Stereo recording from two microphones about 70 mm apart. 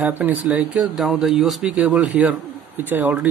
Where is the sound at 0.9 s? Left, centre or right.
Centre.